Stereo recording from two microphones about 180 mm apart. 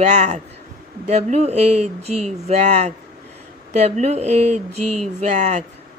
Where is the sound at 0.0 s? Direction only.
40° right (ahead or behind).